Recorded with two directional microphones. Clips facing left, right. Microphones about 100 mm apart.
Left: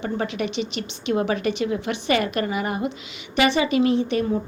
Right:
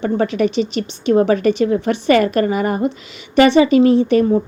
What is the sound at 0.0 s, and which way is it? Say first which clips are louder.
A woman's voice: right 9 dB; 40° right (ahead or behind).